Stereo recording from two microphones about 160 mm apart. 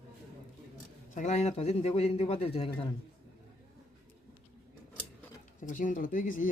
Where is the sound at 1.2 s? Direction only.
45° left (ahead or behind).